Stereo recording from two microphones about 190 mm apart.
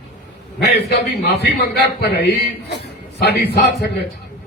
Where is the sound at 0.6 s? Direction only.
60° left (ahead or behind).